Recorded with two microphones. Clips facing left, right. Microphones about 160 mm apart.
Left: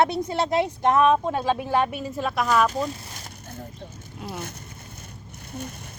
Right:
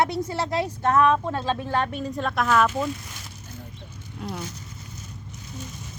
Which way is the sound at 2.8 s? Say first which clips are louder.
Right 1 dB; 35° left (ahead or behind).